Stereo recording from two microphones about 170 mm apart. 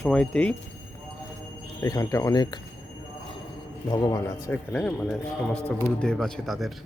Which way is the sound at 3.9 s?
25° left (ahead or behind).